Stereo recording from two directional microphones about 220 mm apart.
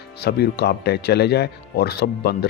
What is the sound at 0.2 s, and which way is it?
Speech, 45° left (ahead or behind).